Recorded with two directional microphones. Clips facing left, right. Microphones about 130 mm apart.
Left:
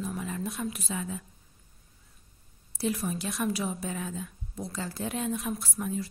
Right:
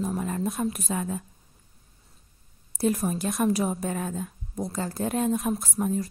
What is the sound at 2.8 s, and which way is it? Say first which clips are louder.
A woman's voice: right 5 dB; 45° right (ahead or behind).